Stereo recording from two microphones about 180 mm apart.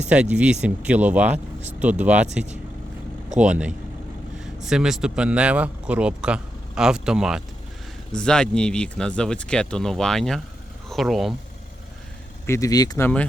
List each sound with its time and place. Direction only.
0.1 s speech: 5° right (ahead or behind)
12.5 s speech: 20° left (ahead or behind)